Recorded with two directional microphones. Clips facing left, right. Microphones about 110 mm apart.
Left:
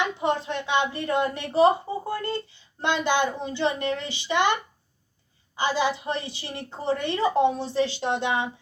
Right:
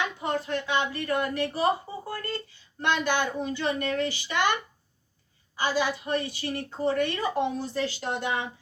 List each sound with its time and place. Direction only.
0.0 s a woman's voice: 25° left (ahead or behind)
5.5 s a woman's voice: 20° left (ahead or behind)